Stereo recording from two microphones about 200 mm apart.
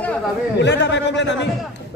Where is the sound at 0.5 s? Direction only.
60° left (ahead or behind).